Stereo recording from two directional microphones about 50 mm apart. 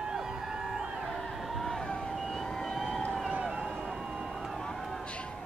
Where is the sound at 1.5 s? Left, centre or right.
Centre.